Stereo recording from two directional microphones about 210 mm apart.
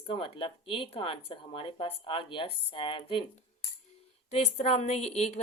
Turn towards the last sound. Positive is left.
turn(degrees=30)  # may be behind; listen again after turning